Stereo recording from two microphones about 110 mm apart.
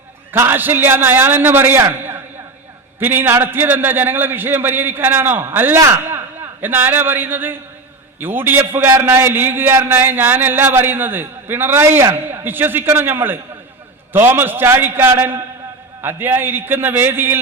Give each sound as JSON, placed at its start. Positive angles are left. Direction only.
{"t": 0.3, "sound": "a man's voice", "side_deg": -20}